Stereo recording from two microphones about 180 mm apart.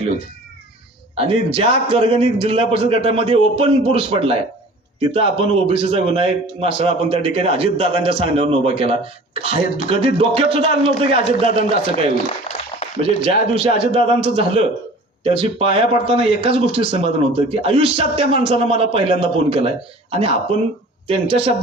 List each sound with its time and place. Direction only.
1.1 s a man's voice: 30° right (ahead or behind)